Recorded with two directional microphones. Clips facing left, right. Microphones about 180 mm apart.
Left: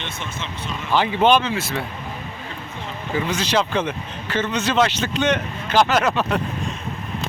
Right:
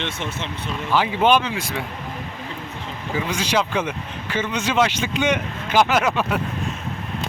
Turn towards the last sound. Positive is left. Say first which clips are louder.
# left 1 dB
turn(degrees=-10)  # may be behind; listen again after turning